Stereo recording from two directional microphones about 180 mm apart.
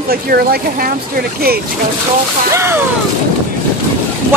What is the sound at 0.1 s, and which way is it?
Speech, 55° right (ahead or behind).